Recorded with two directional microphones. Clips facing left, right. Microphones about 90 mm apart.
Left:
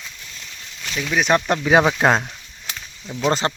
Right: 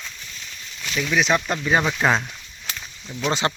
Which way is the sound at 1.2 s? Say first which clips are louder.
Left 5 dB; 50° left (ahead or behind).